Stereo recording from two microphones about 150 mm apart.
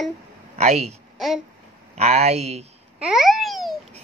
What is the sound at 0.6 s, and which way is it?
Speech, 45° right (ahead or behind).